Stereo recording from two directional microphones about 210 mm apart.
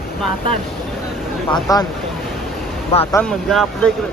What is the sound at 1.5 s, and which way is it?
Speech, 20° left (ahead or behind).